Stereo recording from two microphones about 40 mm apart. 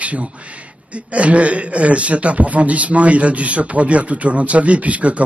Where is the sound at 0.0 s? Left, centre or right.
Right.